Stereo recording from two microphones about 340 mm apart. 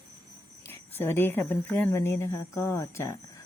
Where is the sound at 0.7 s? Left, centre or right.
Centre.